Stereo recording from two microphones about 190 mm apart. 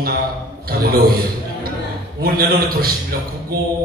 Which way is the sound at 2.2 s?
50° right (ahead or behind).